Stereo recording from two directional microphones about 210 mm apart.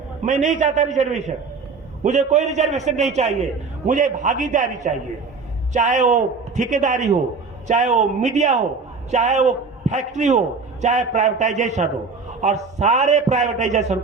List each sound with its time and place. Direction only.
0.3 s a man's voice: 35° right (ahead or behind)